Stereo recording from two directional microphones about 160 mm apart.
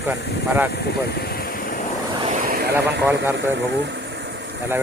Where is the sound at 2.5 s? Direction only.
70° right (ahead or behind).